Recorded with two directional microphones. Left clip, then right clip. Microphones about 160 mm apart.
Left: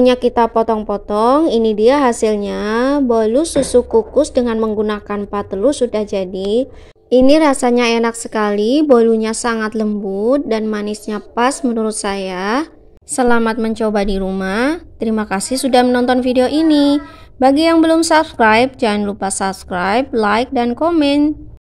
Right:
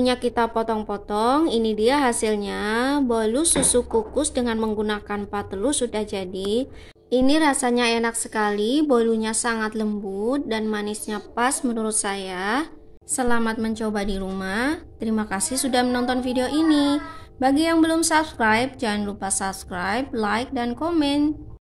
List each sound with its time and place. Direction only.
0.0 s a woman's voice: 40° left (ahead or behind)
7.1 s a woman's voice: 45° left (ahead or behind)
13.1 s a woman's voice: 55° left (ahead or behind)